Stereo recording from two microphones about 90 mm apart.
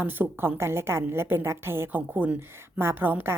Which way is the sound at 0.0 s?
20° right (ahead or behind).